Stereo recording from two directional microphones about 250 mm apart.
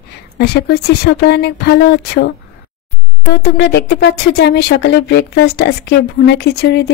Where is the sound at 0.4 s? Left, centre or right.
Left.